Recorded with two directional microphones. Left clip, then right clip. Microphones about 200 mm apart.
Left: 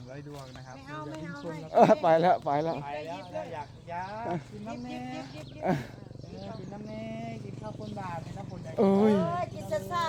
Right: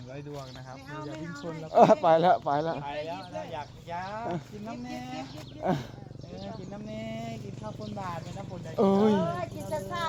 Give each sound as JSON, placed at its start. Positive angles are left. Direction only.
{"t": 1.7, "sound": "speech", "side_deg": 0}
{"t": 2.8, "sound": "speech", "side_deg": -60}
{"t": 5.6, "sound": "speech", "side_deg": 5}
{"t": 6.9, "sound": "vehicle", "side_deg": -45}
{"t": 8.7, "sound": "speech", "side_deg": 5}
{"t": 9.1, "sound": "speech", "side_deg": 55}